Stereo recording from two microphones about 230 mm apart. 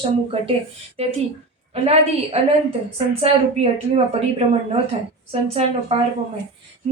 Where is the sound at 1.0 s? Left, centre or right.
Right.